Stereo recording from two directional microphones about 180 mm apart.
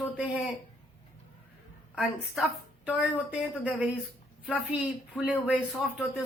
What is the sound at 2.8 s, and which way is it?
Speech, 5° right (ahead or behind).